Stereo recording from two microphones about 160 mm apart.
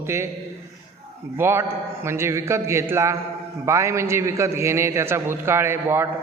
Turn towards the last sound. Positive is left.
turn(degrees=-15)  # may be behind; listen again after turning